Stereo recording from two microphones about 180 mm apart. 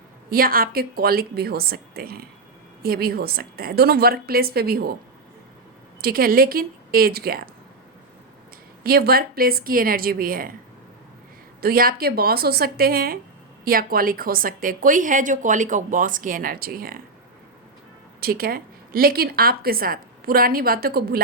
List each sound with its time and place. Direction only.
0.3 s a woman's voice: 55° right (ahead or behind)
6.0 s a woman's voice: 55° right (ahead or behind)
8.8 s a woman's voice: 55° right (ahead or behind)
11.6 s a woman's voice: 55° right (ahead or behind)
18.2 s a woman's voice: 55° right (ahead or behind)